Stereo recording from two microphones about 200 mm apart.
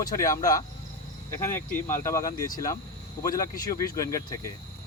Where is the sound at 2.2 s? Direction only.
45° left (ahead or behind).